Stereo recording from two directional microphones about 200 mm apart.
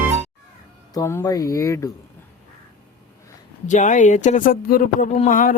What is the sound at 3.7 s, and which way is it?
Speech, 40° left (ahead or behind).